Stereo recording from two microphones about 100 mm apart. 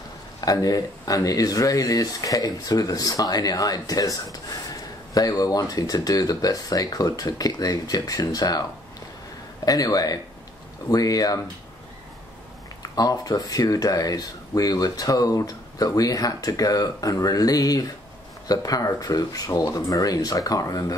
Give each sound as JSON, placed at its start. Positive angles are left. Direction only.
{"t": 0.4, "sound": "speech", "side_deg": 35}
{"t": 9.7, "sound": "speech", "side_deg": 35}
{"t": 12.8, "sound": "speech", "side_deg": 40}